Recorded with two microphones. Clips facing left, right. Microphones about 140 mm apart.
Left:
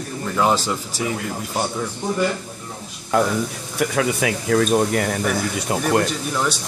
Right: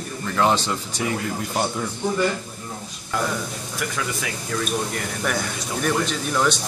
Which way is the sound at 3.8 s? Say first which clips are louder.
Left 9 dB; 70° left (ahead or behind).